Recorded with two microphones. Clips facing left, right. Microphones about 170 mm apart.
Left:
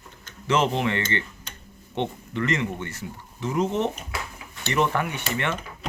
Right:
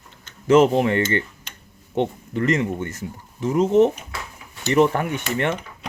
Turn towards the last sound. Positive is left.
turn(degrees=-40)  # may be behind; listen again after turning